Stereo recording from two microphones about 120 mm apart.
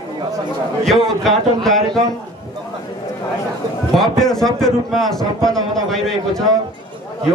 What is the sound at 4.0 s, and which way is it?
A man's voice, 5° left (ahead or behind).